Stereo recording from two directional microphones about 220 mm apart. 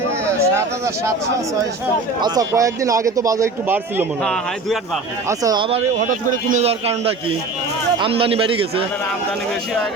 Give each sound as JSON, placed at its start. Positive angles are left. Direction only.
{"t": 0.3, "sound": "a sound", "side_deg": -15}
{"t": 2.2, "sound": "speech", "side_deg": -15}
{"t": 5.4, "sound": "a man's voice", "side_deg": -20}
{"t": 6.1, "sound": "a man's voice", "side_deg": -30}